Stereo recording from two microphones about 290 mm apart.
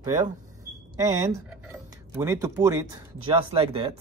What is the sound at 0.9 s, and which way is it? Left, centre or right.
Speech, centre.